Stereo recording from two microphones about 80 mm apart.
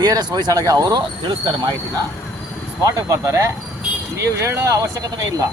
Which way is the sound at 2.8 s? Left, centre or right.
Right.